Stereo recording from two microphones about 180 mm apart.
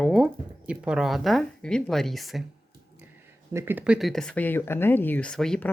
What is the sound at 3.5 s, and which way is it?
Speech, 10° right (ahead or behind).